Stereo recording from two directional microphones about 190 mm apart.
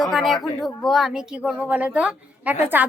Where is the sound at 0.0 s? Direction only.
Centre (ahead or behind).